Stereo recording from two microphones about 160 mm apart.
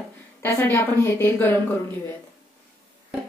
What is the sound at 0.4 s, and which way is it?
A woman's voice, 15° left (ahead or behind).